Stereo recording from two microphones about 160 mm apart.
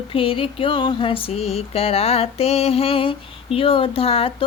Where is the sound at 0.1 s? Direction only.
35° left (ahead or behind).